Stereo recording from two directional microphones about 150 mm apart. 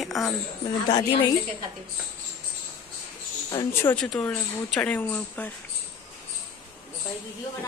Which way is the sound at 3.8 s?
5° left (ahead or behind).